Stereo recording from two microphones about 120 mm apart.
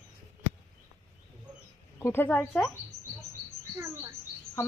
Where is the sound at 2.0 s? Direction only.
20° left (ahead or behind).